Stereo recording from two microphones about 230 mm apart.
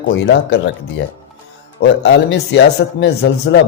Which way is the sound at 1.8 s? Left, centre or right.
Left.